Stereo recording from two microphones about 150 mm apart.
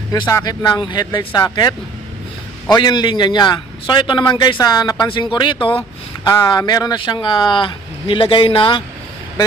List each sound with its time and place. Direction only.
0.1 s speech: 25° left (ahead or behind)
0.8 s a man's voice: 35° left (ahead or behind)
2.6 s a man's voice: 30° left (ahead or behind)